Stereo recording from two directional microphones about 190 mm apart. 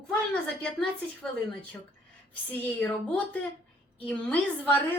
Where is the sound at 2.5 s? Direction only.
10° left (ahead or behind).